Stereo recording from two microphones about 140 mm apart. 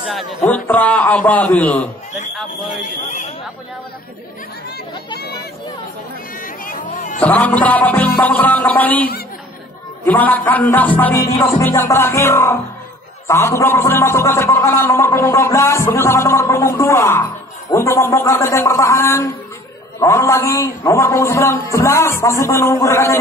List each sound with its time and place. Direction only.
0.1 s speech: centre (ahead or behind)
0.5 s a man's voice: 10° left (ahead or behind)
6.4 s a sound: 80° left
7.2 s a man's voice: 10° left (ahead or behind)
10.0 s a man's voice: 10° left (ahead or behind)
11.4 s music: 20° left (ahead or behind)